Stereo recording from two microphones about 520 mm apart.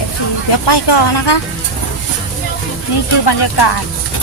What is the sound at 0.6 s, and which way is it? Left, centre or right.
Speech, left.